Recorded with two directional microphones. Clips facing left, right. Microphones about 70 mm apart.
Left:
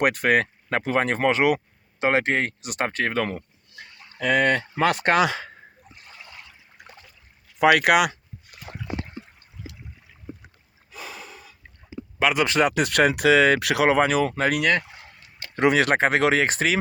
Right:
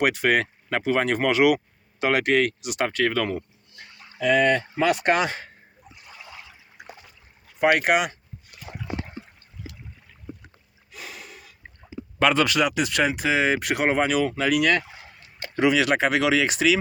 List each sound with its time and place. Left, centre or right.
0.0 s speech: left
4.2 s speech: left
5.8 s water: centre
7.6 s speech: left
8.4 s dog: centre
12.2 s speech: centre
12.5 s speech: left